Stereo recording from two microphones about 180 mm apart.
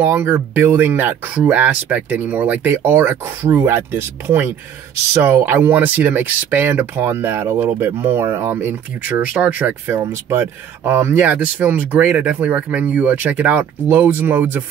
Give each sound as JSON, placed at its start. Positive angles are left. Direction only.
{"t": 0.0, "sound": "speech", "side_deg": -10}